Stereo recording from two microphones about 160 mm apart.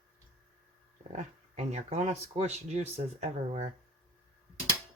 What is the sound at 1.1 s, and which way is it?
Speech, 45° right (ahead or behind).